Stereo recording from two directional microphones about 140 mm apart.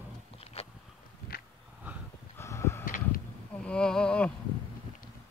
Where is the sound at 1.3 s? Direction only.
90° left.